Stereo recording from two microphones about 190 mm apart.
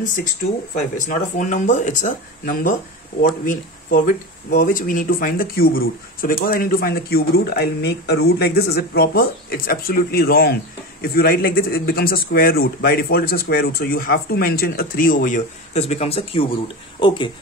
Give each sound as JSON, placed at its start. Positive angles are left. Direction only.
{"t": 1.0, "sound": "speech", "side_deg": 40}